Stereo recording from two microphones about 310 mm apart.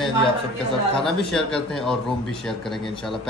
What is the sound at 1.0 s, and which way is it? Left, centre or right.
A man's voice, centre.